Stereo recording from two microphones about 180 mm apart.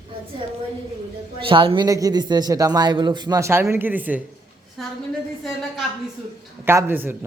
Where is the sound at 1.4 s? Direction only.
30° right (ahead or behind); by 4.2 s 10° right (ahead or behind).